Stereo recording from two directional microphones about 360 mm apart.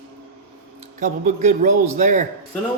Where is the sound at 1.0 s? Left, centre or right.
Right.